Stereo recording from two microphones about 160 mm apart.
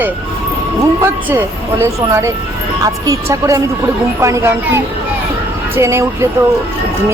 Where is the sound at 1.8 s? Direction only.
15° right (ahead or behind).